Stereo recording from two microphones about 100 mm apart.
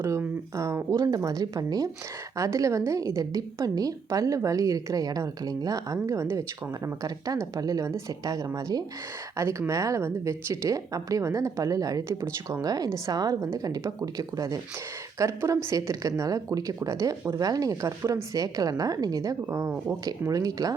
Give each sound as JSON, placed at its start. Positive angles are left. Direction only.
{"t": 0.0, "sound": "a woman's voice", "side_deg": -30}
{"t": 12.2, "sound": "speech", "side_deg": -25}
{"t": 12.6, "sound": "a woman's voice", "side_deg": -40}
{"t": 19.5, "sound": "speech", "side_deg": -25}
{"t": 20.1, "sound": "a woman's voice", "side_deg": -35}